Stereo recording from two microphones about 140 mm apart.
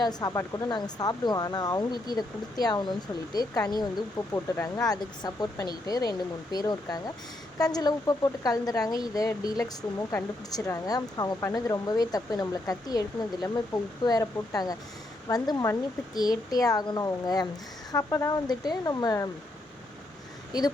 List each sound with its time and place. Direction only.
0.0 s speech: 30° left (ahead or behind)